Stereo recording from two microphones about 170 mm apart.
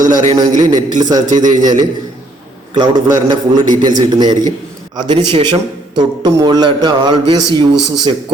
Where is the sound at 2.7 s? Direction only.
25° right (ahead or behind).